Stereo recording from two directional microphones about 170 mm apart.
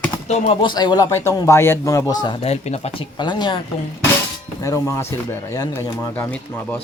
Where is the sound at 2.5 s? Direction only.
40° left (ahead or behind).